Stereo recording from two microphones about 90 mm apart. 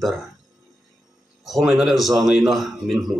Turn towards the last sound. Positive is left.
turn(degrees=0)  # may be behind; listen again after turning